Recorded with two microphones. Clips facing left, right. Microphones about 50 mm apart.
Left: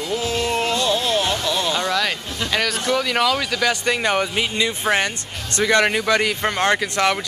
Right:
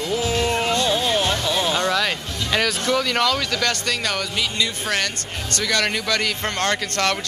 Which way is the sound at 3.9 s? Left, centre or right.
Left.